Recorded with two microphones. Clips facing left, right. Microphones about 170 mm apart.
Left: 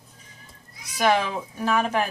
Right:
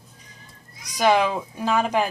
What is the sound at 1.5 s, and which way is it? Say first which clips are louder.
Speech: right 1 dB; 15° right (ahead or behind).